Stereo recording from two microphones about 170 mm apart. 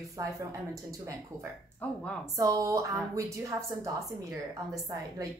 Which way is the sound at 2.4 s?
20° right (ahead or behind).